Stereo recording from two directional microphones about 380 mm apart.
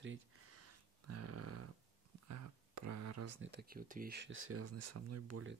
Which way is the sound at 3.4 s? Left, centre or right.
Right.